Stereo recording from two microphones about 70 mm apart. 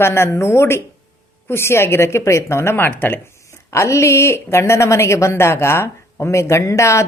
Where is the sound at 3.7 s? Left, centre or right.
Left.